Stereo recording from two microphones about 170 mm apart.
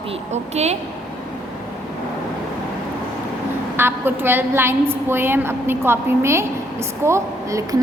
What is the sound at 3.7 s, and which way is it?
A woman's voice, 15° right (ahead or behind).